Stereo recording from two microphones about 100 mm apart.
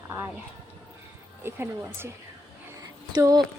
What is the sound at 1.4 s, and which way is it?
Speech, 25° right (ahead or behind).